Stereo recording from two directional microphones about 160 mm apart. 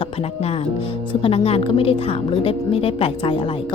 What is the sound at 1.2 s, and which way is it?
Speech, 35° left (ahead or behind).